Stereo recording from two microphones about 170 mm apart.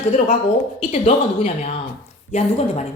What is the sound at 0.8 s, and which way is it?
Speech, 35° left (ahead or behind).